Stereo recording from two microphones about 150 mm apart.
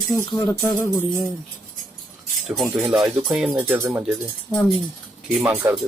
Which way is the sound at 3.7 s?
15° right (ahead or behind).